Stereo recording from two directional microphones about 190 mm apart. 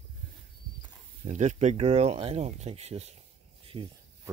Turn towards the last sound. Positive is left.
turn(degrees=-30)  # may be behind; listen again after turning